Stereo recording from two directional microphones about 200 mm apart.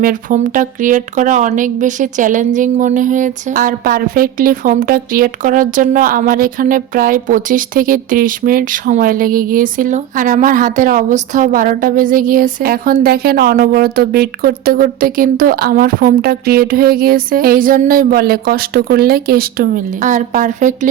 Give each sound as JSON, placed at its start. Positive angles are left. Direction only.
{"t": 0.0, "sound": "speech", "side_deg": -40}